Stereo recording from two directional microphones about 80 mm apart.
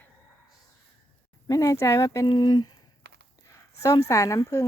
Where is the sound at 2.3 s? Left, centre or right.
Left.